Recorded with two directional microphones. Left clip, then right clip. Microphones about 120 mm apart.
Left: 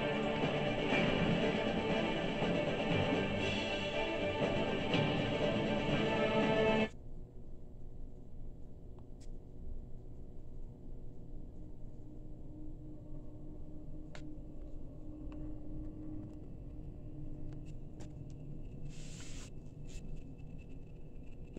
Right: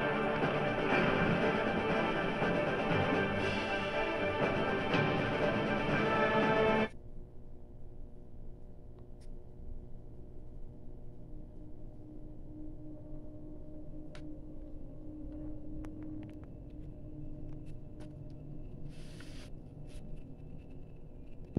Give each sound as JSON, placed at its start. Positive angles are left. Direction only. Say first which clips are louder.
{"t": 0.0, "sound": "music", "louder": "right 3 dB", "side_deg": 15}